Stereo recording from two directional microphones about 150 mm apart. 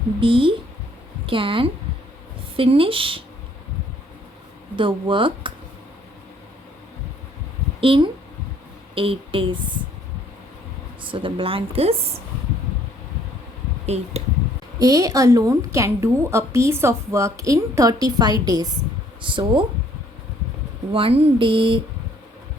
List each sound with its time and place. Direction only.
0.2 s speech: 35° right (ahead or behind)
4.8 s speech: 35° right (ahead or behind)
7.8 s speech: 35° right (ahead or behind)
11.0 s speech: 35° right (ahead or behind)
13.8 s speech: 45° right (ahead or behind)
14.8 s a woman's voice: 25° right (ahead or behind)
20.9 s speech: 40° right (ahead or behind)